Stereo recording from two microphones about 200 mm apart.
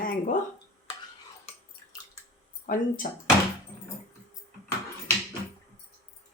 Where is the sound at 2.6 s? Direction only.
40° left (ahead or behind).